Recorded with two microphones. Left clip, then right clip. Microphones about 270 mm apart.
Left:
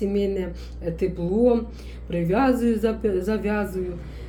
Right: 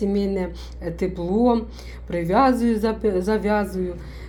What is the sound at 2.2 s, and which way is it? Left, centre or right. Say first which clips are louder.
A woman's voice: right 3 dB; centre.